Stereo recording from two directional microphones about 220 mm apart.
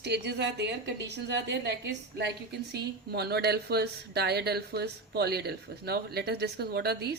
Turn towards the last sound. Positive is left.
turn(degrees=-45)  # may be behind; listen again after turning